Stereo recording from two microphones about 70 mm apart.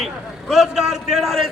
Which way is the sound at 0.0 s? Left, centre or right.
Centre.